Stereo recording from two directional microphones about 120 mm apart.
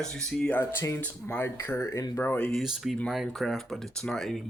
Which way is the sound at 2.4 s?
Centre (ahead or behind).